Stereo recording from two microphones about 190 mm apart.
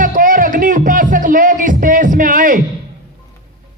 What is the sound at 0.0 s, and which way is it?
Music, 45° right (ahead or behind).